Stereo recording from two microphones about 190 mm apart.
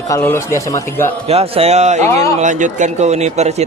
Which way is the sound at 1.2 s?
30° right (ahead or behind).